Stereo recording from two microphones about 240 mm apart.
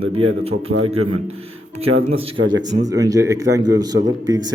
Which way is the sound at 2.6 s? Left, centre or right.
Right.